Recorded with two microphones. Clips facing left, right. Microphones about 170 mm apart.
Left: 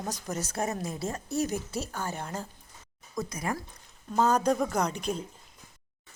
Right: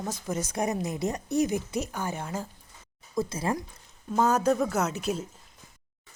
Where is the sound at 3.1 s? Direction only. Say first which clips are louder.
Right 4 dB; 30° right (ahead or behind).